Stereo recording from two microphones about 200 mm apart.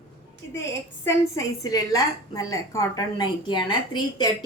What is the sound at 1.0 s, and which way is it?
A woman's voice, 15° left (ahead or behind).